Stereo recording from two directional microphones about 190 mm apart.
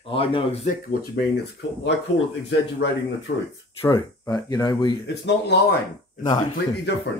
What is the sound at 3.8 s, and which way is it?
Speech, 15° left (ahead or behind).